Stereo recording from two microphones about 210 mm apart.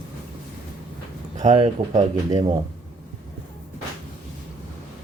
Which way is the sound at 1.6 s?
35° right (ahead or behind).